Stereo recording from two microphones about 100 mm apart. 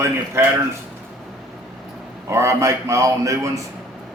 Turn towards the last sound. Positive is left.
turn(degrees=-35)  # may be behind; listen again after turning